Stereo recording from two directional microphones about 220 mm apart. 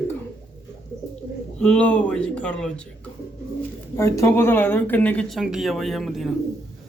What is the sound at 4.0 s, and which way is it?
Speech, 10° left (ahead or behind).